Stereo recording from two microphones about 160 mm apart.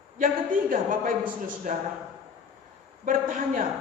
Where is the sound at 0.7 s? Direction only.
60° right (ahead or behind).